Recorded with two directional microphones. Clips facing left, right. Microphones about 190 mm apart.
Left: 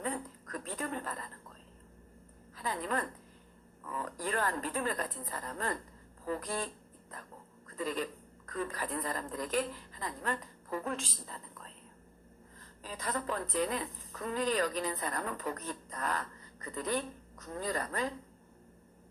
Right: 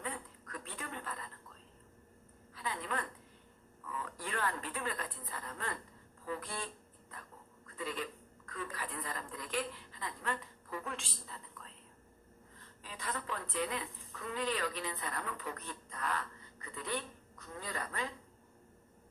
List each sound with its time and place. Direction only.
0.0 s a sound: 40° left (ahead or behind)
2.6 s a woman's voice: 40° left (ahead or behind)
7.8 s a woman's voice: 40° left (ahead or behind)